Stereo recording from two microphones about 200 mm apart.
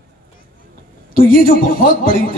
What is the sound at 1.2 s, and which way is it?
Speech, 45° left (ahead or behind).